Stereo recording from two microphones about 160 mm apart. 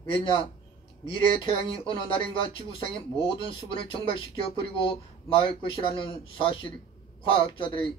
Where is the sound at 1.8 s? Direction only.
35° left (ahead or behind).